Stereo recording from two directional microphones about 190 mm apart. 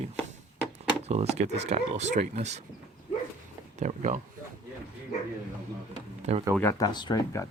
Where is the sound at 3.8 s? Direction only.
40° right (ahead or behind).